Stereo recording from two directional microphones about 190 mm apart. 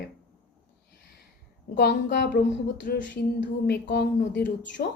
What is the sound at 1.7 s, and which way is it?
Speech, 65° left (ahead or behind).